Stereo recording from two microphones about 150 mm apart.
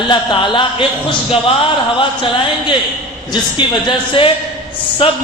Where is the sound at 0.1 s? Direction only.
30° left (ahead or behind).